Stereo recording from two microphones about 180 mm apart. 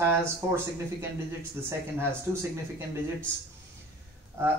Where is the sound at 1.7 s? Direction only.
15° right (ahead or behind).